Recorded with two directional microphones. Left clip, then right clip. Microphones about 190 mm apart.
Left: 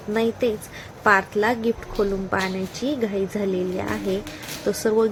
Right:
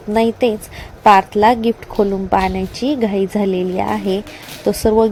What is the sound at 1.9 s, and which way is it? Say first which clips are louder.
Speech: right 10 dB; 15° right (ahead or behind).